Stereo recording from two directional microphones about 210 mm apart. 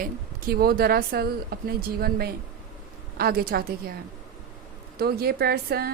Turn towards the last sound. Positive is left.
turn(degrees=-45)  # may be behind; listen again after turning